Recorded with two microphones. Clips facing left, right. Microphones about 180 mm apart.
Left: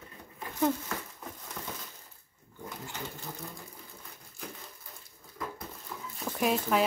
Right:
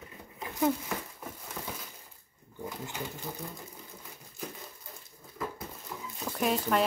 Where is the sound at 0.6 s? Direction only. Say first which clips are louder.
Even; 10° right (ahead or behind).